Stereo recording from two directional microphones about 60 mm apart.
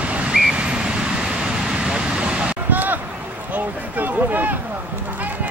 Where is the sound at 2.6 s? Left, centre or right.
Right.